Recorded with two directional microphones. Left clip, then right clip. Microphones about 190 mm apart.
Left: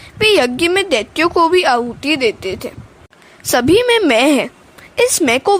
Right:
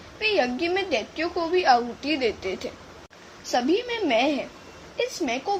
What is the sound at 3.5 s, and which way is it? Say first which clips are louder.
Speech: left 13 dB; 55° left (ahead or behind).